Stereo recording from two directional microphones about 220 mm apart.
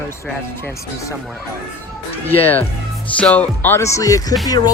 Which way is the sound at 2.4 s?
10° left (ahead or behind).